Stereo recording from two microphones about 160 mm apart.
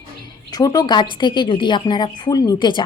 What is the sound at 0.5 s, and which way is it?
Speech, 25° left (ahead or behind).